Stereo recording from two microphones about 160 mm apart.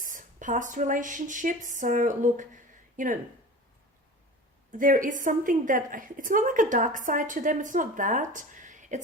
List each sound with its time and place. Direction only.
0.0 s a woman's voice: 55° right (ahead or behind)
4.8 s a woman's voice: 55° right (ahead or behind)